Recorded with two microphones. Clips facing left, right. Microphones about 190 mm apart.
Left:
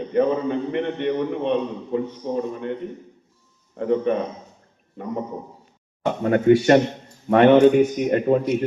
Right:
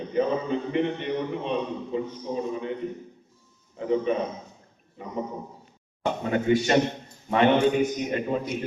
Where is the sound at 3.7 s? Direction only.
60° left (ahead or behind).